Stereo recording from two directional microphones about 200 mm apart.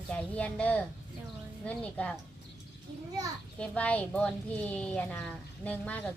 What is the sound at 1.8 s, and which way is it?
Speech, 5° left (ahead or behind).